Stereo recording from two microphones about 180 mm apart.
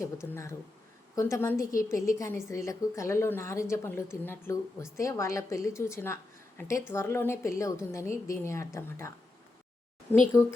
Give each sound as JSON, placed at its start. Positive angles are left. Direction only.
{"t": 0.0, "sound": "a woman's voice", "side_deg": 15}